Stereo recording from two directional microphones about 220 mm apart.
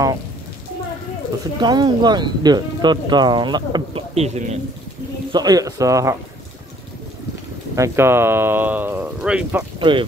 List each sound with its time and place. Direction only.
1.6 s speech: 20° right (ahead or behind)
5.3 s speech: 15° right (ahead or behind)
7.7 s speech: 15° right (ahead or behind)
9.8 s speech: 20° right (ahead or behind)